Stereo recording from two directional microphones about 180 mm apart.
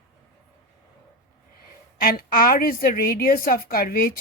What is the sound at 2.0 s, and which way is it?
A woman's voice, 55° left (ahead or behind).